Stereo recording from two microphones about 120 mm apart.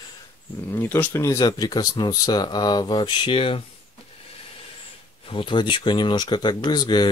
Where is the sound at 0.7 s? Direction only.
20° left (ahead or behind).